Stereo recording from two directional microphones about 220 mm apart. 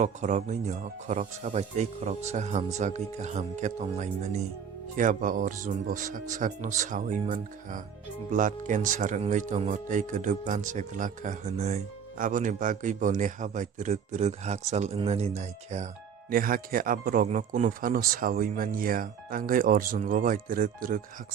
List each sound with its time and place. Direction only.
0.0 s speech: 35° right (ahead or behind)